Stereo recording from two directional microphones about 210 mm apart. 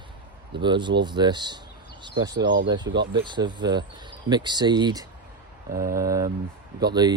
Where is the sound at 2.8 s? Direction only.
55° right (ahead or behind).